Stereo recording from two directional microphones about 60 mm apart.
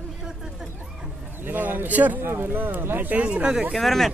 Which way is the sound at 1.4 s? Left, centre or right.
Right.